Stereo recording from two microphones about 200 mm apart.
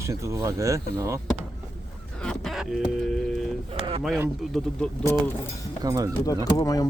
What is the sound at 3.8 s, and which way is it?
Speech, 25° right (ahead or behind).